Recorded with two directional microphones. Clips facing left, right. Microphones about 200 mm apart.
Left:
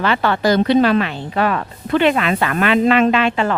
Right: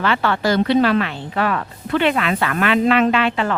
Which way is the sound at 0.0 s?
15° left (ahead or behind).